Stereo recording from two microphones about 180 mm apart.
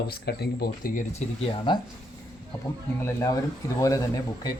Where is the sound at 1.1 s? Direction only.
35° left (ahead or behind).